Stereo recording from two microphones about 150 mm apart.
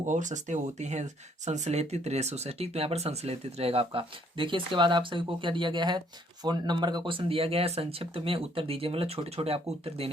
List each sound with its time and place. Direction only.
0.0 s speech: 55° right (ahead or behind)